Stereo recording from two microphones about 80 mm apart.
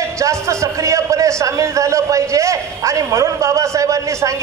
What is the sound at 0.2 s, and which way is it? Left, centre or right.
A man's voice, right.